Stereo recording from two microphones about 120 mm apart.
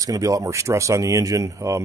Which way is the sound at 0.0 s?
30° right (ahead or behind).